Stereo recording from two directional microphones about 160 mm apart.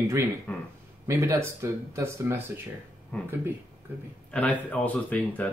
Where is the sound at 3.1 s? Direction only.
5° left (ahead or behind).